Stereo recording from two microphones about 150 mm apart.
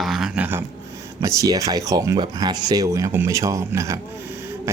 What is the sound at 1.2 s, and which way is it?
A man's voice, 20° right (ahead or behind).